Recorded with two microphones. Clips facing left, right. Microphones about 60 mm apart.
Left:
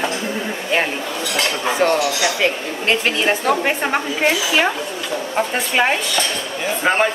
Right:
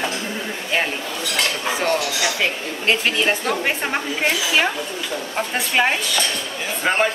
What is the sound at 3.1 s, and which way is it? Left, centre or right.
A woman's voice, centre.